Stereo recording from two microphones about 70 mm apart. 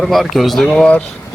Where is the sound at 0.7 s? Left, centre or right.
Centre.